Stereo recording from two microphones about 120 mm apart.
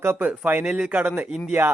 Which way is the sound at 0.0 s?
15° right (ahead or behind).